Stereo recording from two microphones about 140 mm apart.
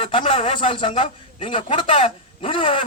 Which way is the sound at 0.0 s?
40° left (ahead or behind).